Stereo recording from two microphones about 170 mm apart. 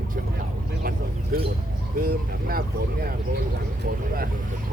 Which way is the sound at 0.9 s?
65° right (ahead or behind).